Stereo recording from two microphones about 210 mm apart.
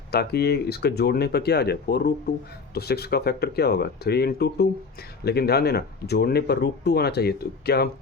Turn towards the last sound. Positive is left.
turn(degrees=50)  # may be behind; listen again after turning